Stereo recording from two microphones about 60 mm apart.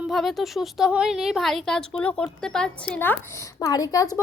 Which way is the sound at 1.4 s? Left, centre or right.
Centre.